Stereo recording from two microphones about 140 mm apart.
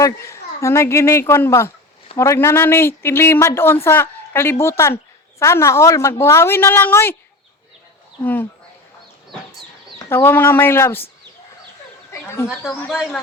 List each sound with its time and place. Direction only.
0.0 s a woman's voice: 20° left (ahead or behind)
8.2 s speech: 15° left (ahead or behind)
10.1 s speech: 15° left (ahead or behind)
12.1 s a sound: 20° left (ahead or behind)
12.5 s speech: 5° right (ahead or behind)